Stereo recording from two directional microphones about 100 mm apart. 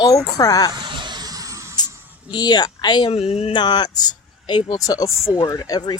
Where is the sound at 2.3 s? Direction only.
45° left (ahead or behind).